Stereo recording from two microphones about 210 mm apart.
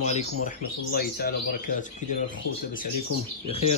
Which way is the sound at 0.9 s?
45° left (ahead or behind).